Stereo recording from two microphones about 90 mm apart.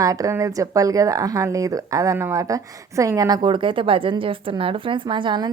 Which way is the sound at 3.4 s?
65° right (ahead or behind).